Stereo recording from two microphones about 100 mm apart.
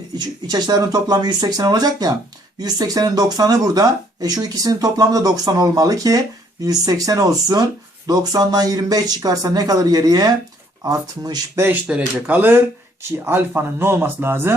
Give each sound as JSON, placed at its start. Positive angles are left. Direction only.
{"t": 0.4, "sound": "speech", "side_deg": -40}
{"t": 11.5, "sound": "speech", "side_deg": -20}